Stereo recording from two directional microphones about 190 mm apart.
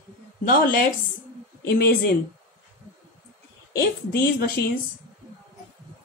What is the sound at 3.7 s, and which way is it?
Speech, 55° left (ahead or behind).